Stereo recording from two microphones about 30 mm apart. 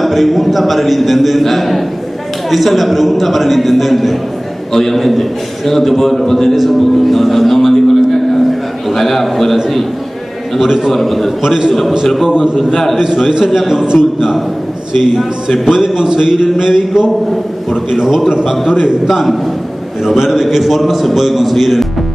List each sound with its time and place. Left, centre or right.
0.0 s a man's voice: centre
6.8 s a sound: centre
9.0 s a man's voice: centre
10.6 s a man's voice: centre
10.9 s a man's voice: centre
11.4 s speech: right
12.5 s a man's voice: centre
12.9 s a man's voice: right
15.0 s a man's voice: centre
19.0 s a man's voice: centre